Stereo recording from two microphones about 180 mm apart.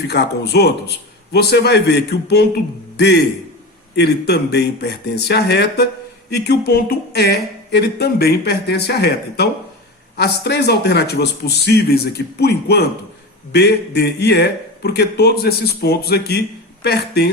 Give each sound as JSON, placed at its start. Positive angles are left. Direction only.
{"t": 0.1, "sound": "speech", "side_deg": 65}